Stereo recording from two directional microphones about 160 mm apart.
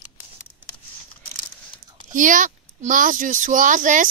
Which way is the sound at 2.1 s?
55° right (ahead or behind).